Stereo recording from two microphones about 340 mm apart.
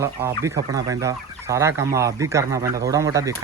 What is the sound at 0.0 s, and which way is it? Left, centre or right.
Speech, centre.